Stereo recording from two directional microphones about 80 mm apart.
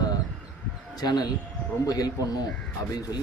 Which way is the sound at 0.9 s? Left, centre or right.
Left.